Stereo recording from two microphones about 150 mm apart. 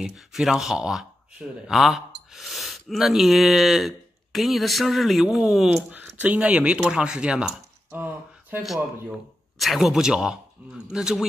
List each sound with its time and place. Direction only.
0.0 s speech: centre (ahead or behind)
7.9 s a sound: 15° right (ahead or behind)
9.6 s speech: centre (ahead or behind)